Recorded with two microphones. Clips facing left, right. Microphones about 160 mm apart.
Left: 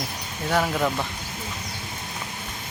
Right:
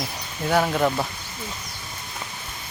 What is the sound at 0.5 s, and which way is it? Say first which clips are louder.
Speech: right 2 dB; centre (ahead or behind).